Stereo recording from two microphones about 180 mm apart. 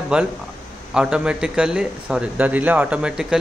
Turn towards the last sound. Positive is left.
turn(degrees=-5)  # may be behind; listen again after turning